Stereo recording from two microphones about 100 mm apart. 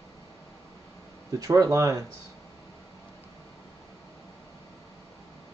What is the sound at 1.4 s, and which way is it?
Speech, 30° right (ahead or behind).